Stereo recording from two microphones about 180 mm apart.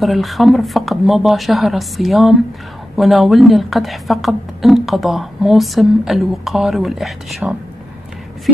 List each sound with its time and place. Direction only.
0.0 s speech: centre (ahead or behind)